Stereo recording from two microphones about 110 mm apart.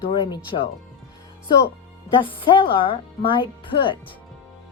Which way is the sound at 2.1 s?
50° left (ahead or behind).